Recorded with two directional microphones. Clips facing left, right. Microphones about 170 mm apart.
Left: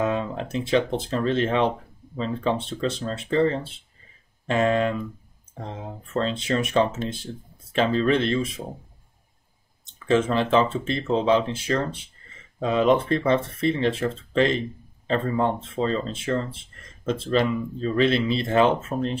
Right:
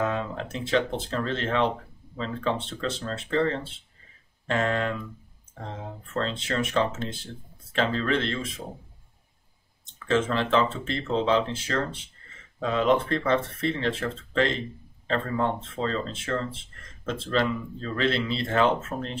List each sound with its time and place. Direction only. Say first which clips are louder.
0.0 s speech: left 3 dB; 20° left (ahead or behind)
6.1 s speech: left 4 dB; 15° left (ahead or behind)
10.0 s speech: left 4 dB; 15° left (ahead or behind)